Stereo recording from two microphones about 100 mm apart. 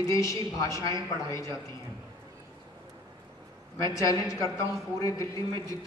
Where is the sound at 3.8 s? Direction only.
35° left (ahead or behind).